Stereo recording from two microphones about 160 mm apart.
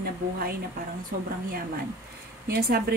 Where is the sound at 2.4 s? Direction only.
75° right (ahead or behind).